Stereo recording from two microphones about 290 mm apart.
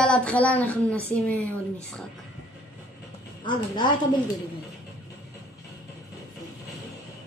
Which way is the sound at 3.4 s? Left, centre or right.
Centre.